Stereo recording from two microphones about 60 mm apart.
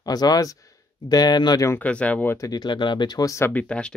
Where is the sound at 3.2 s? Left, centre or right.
Left.